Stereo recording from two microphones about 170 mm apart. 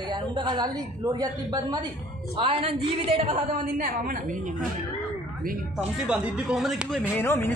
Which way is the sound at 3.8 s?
50° right (ahead or behind).